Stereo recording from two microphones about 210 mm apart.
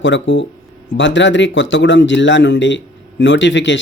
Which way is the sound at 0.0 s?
60° left (ahead or behind).